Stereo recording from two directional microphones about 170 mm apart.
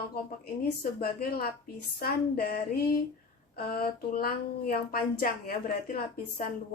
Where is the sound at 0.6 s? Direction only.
65° left (ahead or behind).